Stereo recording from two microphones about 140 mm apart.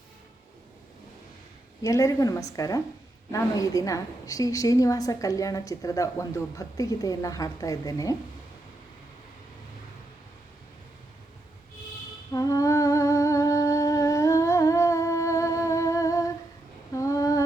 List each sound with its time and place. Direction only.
1.8 s a woman's voice: 25° left (ahead or behind)
12.3 s humming: 25° left (ahead or behind)